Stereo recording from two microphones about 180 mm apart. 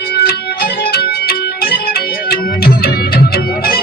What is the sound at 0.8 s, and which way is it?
Organ, 60° left (ahead or behind).